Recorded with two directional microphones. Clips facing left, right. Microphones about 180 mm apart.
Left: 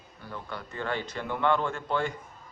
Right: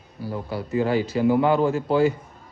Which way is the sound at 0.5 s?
5° right (ahead or behind).